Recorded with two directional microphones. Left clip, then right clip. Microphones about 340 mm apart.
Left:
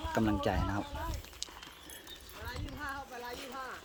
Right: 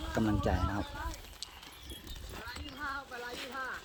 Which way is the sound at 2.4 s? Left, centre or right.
Left.